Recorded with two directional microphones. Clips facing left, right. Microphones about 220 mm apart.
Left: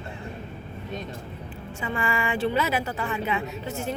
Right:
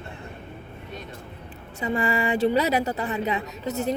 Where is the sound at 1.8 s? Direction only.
35° right (ahead or behind).